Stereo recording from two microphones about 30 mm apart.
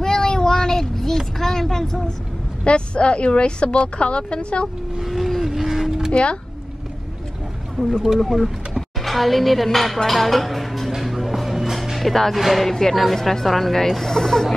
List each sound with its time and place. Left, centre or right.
0.0 s child singing: centre
2.6 s speech: left
5.0 s a sound: centre
7.8 s speech: centre
11.0 s music: centre
12.1 s speech: centre
12.7 s speech: centre